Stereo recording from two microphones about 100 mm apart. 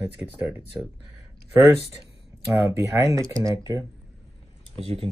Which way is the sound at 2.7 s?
30° right (ahead or behind).